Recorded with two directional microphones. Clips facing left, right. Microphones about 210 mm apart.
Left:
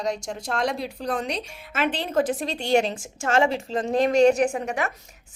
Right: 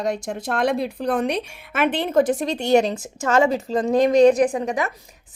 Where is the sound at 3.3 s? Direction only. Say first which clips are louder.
Right 3 dB; 40° right (ahead or behind).